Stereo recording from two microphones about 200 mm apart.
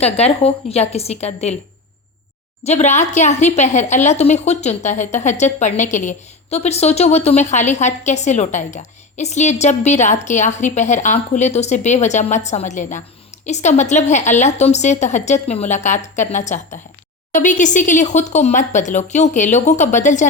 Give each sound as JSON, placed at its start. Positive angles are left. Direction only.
{"t": 0.0, "sound": "a woman's voice", "side_deg": 30}
{"t": 2.6, "sound": "a woman's voice", "side_deg": 35}